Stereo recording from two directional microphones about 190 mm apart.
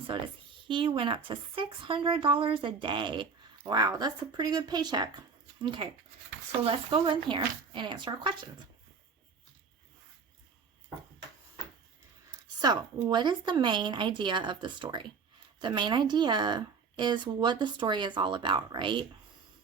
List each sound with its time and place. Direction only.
0.7 s speech: 25° right (ahead or behind)
12.6 s speech: 25° right (ahead or behind)